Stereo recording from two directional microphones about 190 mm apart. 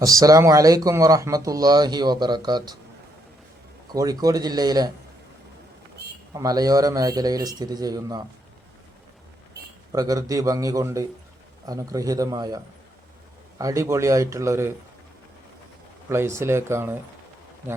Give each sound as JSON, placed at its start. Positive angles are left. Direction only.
{"t": 0.0, "sound": "speech", "side_deg": -20}
{"t": 3.9, "sound": "speech", "side_deg": -20}
{"t": 6.3, "sound": "speech", "side_deg": -20}
{"t": 9.9, "sound": "speech", "side_deg": -20}
{"t": 16.0, "sound": "speech", "side_deg": -15}